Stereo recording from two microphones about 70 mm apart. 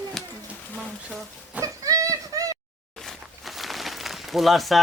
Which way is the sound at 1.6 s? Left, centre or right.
Right.